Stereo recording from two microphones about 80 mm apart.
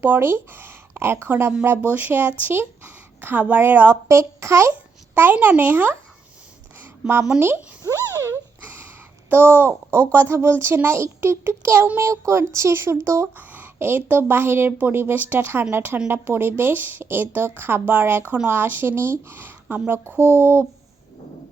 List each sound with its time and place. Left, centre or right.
0.0 s speech: right
4.1 s a child's voice: right
5.1 s speech: right
7.3 s speech: right
7.9 s a sound: right
9.3 s a child's voice: right
13.3 s speech: right